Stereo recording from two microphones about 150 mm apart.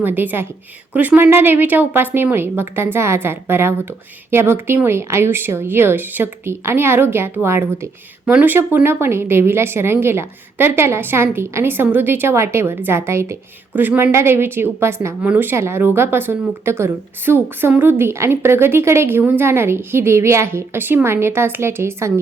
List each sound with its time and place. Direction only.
0.0 s a woman's voice: 15° right (ahead or behind)